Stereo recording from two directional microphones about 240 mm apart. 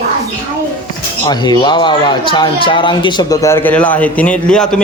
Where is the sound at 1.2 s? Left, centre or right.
Centre.